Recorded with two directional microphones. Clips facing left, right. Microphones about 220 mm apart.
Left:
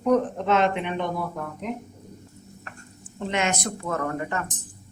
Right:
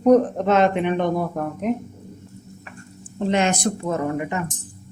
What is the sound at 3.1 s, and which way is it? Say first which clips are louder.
Speech: right 6 dB; 35° right (ahead or behind).